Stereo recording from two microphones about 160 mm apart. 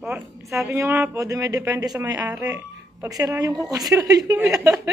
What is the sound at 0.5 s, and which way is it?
A man's voice, 15° right (ahead or behind).